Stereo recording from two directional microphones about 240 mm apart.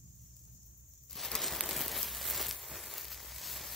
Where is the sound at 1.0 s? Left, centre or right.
Centre.